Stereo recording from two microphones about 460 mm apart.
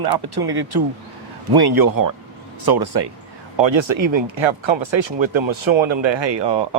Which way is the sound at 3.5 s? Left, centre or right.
Right.